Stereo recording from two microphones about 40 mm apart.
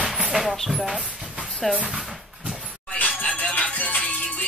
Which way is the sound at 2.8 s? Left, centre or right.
Left.